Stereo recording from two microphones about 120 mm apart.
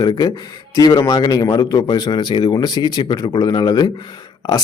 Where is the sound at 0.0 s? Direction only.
35° left (ahead or behind).